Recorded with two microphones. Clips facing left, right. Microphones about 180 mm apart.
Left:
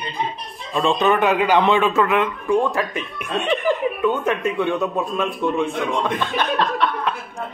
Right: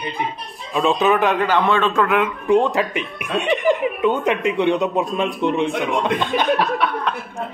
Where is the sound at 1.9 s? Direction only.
Centre (ahead or behind).